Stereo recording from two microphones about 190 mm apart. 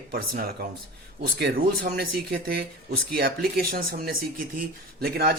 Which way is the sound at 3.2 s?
50° right (ahead or behind).